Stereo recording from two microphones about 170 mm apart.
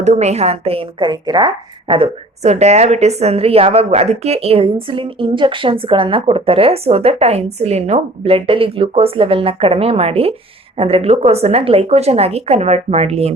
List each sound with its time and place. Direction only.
0.0 s a woman's voice: 40° right (ahead or behind)